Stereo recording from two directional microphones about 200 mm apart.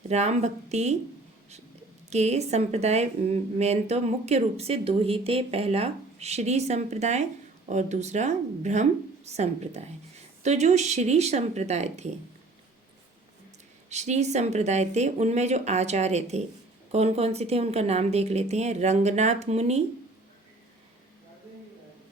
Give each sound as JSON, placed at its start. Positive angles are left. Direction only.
{"t": 0.1, "sound": "speech", "side_deg": -35}
{"t": 2.0, "sound": "speech", "side_deg": -35}
{"t": 13.9, "sound": "speech", "side_deg": -35}